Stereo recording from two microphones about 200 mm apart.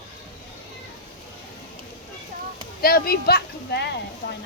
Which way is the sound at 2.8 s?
50° left (ahead or behind).